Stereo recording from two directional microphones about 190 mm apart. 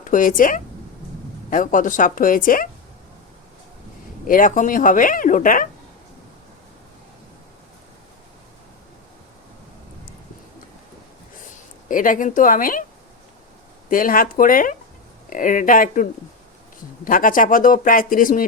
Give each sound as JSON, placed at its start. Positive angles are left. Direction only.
{"t": 0.0, "sound": "a woman's voice", "side_deg": 45}
{"t": 4.3, "sound": "speech", "side_deg": 45}
{"t": 11.9, "sound": "speech", "side_deg": 45}
{"t": 13.9, "sound": "speech", "side_deg": 45}